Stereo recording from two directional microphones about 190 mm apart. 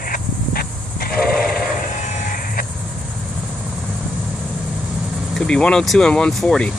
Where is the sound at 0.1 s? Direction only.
50° left (ahead or behind).